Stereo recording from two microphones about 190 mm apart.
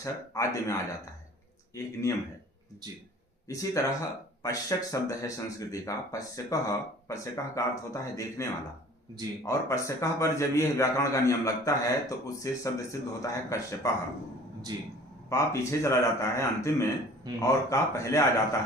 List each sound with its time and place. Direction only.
0.0 s a man's voice: 15° left (ahead or behind)
3.5 s a man's voice: 15° left (ahead or behind)
14.7 s a man's voice: 20° right (ahead or behind)
15.3 s a man's voice: 15° left (ahead or behind)
17.3 s a man's voice: 20° right (ahead or behind)
17.7 s a man's voice: 15° left (ahead or behind)